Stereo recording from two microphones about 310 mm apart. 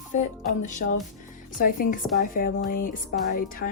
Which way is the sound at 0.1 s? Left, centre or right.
Left.